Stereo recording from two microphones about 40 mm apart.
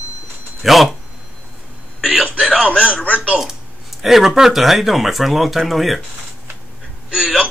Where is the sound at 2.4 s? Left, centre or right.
Centre.